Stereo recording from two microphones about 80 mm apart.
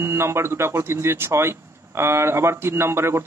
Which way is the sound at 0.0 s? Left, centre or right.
Right.